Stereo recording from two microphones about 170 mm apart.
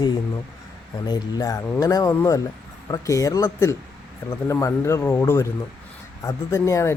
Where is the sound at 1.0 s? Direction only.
20° left (ahead or behind).